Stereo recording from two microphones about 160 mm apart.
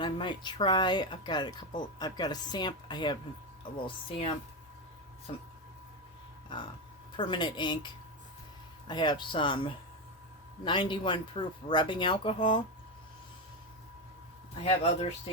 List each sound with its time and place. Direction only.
0.0 s speech: 30° left (ahead or behind)
6.5 s speech: 30° left (ahead or behind)
8.9 s speech: 30° left (ahead or behind)
14.6 s speech: 40° left (ahead or behind)